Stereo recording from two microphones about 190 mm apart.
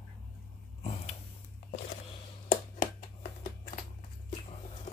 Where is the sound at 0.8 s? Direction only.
35° left (ahead or behind).